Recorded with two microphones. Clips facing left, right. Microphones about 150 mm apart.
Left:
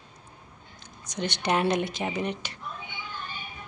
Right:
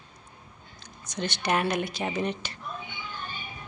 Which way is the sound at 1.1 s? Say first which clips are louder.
Left 1 dB; 15° left (ahead or behind).